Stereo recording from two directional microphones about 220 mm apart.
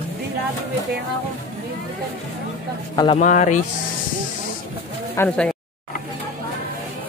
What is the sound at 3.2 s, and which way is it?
Speech, 35° left (ahead or behind).